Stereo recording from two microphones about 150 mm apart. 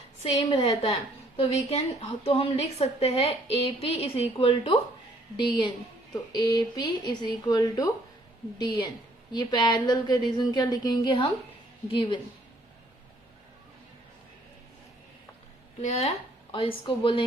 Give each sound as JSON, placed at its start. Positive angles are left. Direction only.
{"t": 0.4, "sound": "a woman's voice", "side_deg": 40}
{"t": 5.4, "sound": "a woman's voice", "side_deg": 30}
{"t": 15.8, "sound": "a woman's voice", "side_deg": 45}